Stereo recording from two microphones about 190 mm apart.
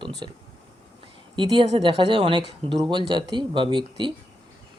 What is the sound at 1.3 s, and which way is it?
Speech, 25° right (ahead or behind).